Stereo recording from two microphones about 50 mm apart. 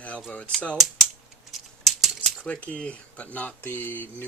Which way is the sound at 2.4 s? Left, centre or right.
Left.